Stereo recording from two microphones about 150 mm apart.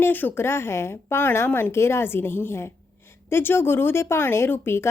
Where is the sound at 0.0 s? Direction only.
15° left (ahead or behind).